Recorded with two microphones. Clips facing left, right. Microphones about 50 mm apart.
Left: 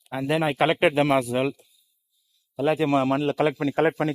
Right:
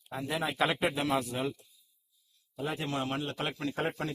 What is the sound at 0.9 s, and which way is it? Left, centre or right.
Speech, left.